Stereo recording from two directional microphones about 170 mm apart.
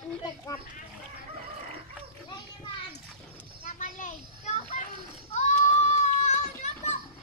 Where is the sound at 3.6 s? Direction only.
45° left (ahead or behind).